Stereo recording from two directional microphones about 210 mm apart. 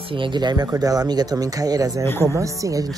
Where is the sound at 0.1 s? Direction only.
20° right (ahead or behind).